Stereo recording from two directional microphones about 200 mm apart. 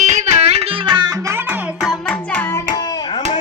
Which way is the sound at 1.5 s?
Centre (ahead or behind).